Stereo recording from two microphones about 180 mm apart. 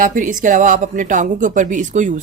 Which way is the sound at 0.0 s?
50° right (ahead or behind).